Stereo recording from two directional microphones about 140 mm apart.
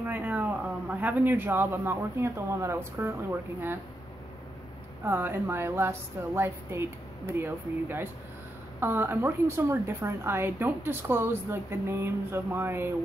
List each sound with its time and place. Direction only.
0.0 s a woman's voice: 15° right (ahead or behind)
5.0 s a woman's voice: 15° right (ahead or behind)